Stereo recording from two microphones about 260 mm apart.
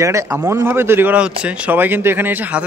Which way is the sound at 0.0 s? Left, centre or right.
Centre.